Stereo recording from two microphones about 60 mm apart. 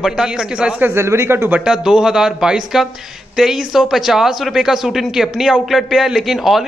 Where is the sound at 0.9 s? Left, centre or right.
Right.